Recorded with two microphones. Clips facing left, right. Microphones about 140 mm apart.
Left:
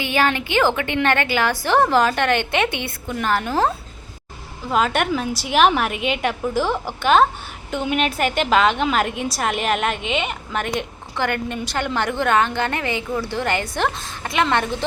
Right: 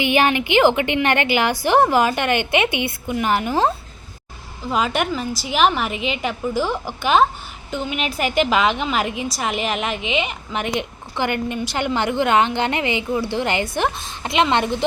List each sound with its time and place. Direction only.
0.0 s a woman's voice: 20° right (ahead or behind)
4.7 s a woman's voice: centre (ahead or behind)
10.6 s a woman's voice: 50° left (ahead or behind)
11.2 s a woman's voice: 15° right (ahead or behind)